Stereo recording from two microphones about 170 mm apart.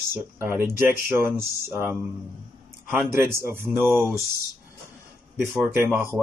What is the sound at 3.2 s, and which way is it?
Speech, 15° right (ahead or behind).